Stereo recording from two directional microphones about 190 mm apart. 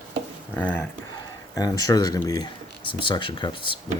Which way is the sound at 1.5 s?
20° left (ahead or behind).